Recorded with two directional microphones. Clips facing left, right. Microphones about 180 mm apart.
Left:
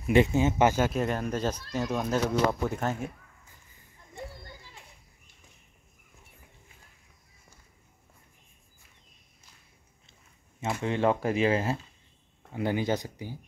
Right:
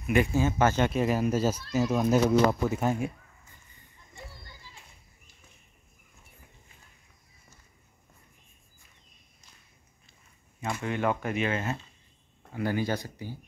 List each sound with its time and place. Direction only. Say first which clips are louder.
0.0 s speech: left 2 dB; 25° left (ahead or behind)
0.7 s speech: right 2 dB; centre (ahead or behind)
10.6 s speech: left 3 dB; 25° left (ahead or behind)
12.5 s speech: left 1 dB; 20° left (ahead or behind)